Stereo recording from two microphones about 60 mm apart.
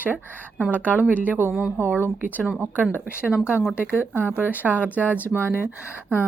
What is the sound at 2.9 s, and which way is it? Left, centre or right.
Speech, right.